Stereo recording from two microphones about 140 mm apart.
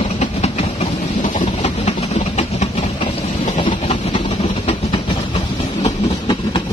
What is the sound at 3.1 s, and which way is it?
Train, 50° left (ahead or behind).